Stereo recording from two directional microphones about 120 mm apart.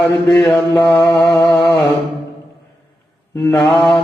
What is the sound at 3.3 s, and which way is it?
Mantra, 25° left (ahead or behind).